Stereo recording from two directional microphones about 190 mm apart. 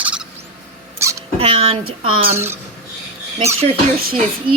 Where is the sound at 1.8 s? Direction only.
90° right.